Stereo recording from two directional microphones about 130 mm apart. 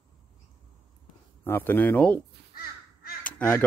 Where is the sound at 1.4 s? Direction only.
15° left (ahead or behind).